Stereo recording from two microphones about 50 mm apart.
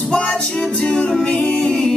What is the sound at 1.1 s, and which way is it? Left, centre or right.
A capella, centre.